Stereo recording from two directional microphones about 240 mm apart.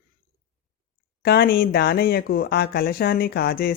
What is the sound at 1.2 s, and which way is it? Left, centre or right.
A woman's voice, left.